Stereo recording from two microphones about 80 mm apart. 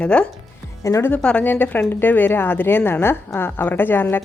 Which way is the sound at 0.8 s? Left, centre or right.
Left.